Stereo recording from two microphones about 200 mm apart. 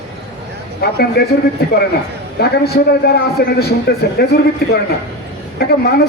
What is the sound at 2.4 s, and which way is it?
A man's voice, 55° left (ahead or behind).